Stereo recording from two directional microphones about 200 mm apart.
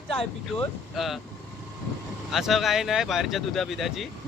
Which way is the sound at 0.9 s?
Centre (ahead or behind).